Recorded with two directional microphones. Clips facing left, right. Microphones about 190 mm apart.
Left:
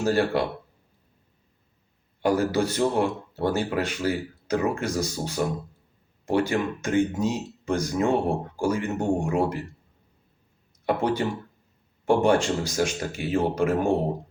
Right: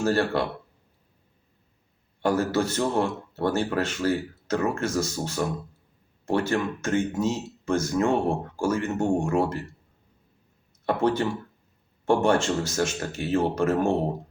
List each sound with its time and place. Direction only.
0.0 s speech: 15° left (ahead or behind)
2.2 s speech: 15° left (ahead or behind)
10.8 s speech: 15° left (ahead or behind)